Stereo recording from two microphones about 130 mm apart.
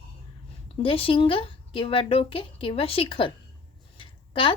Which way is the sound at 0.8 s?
45° left (ahead or behind).